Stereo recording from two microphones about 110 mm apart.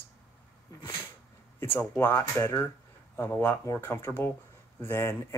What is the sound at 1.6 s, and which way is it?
Speech, 20° left (ahead or behind).